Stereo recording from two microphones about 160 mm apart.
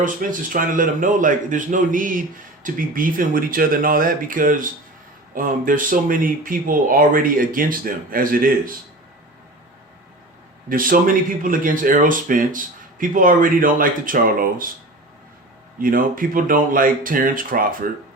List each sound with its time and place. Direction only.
0.0 s speech: 55° right (ahead or behind)
10.7 s speech: 60° right (ahead or behind)
15.8 s speech: 60° right (ahead or behind)